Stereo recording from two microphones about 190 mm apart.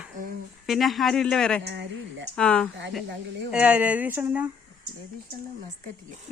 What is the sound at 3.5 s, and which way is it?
Speech, 5° right (ahead or behind).